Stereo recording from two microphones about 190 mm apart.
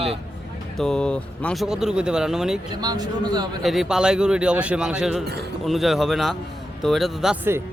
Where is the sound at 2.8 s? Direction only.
20° right (ahead or behind).